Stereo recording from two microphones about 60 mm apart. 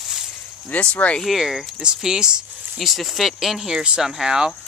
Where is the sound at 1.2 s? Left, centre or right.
Centre.